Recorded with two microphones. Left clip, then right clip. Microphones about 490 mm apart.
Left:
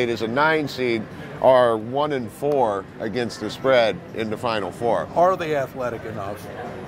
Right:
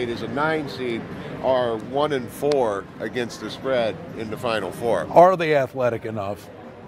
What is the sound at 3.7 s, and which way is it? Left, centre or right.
Speech, left.